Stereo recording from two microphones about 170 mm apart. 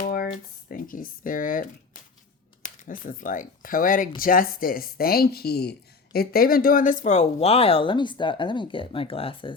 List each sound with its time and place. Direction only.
0.0 s a sound: 60° left (ahead or behind)
0.7 s speech: 55° left (ahead or behind)
2.6 s speech: 50° left (ahead or behind); by 9.5 s 30° left (ahead or behind)